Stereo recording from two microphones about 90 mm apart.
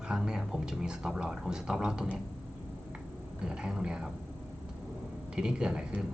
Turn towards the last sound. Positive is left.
turn(degrees=-10)  # may be behind; listen again after turning